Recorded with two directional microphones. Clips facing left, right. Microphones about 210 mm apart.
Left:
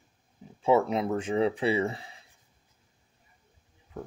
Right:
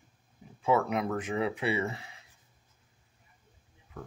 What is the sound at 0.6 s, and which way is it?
Speech, 25° left (ahead or behind).